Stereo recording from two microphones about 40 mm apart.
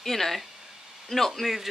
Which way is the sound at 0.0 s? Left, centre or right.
Centre.